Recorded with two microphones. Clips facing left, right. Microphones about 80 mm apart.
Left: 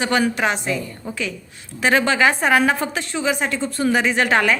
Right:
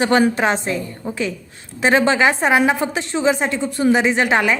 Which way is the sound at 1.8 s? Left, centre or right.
Right.